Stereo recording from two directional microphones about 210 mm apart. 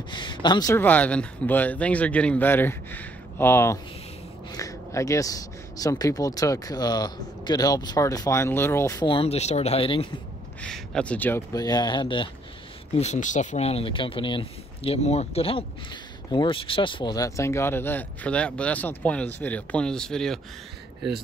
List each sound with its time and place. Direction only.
0.1 s speech: 20° left (ahead or behind)
10.6 s speech: 5° left (ahead or behind); by 12.3 s 20° left (ahead or behind)
12.9 s speech: 35° left (ahead or behind); by 20.3 s 5° left (ahead or behind)